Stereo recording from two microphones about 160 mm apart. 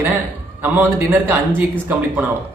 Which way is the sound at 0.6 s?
15° right (ahead or behind).